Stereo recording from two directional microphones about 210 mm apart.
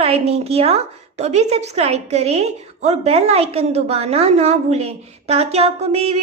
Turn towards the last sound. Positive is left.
turn(degrees=-30)  # may be behind; listen again after turning